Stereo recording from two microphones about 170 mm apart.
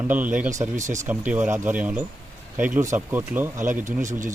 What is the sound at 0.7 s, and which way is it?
Speech, 45° right (ahead or behind).